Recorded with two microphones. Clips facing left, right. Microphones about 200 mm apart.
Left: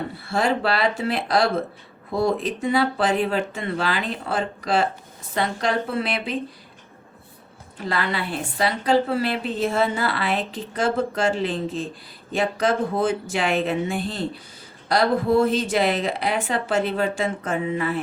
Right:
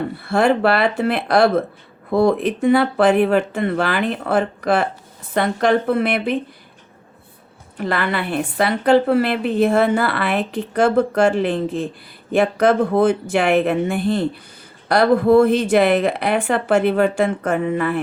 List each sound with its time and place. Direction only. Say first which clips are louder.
0.3 s a woman's voice: right 6 dB; 60° right (ahead or behind)
7.8 s a woman's voice: right 4 dB; 60° right (ahead or behind)